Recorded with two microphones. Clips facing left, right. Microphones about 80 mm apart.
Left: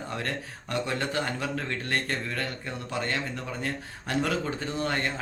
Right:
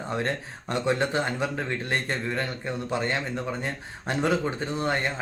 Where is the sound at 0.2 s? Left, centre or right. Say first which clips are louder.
Right 4 dB; right.